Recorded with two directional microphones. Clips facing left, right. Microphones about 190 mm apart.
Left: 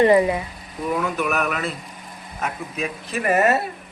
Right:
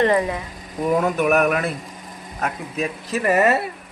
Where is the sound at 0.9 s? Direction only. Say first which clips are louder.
Right 5 dB; 45° right (ahead or behind).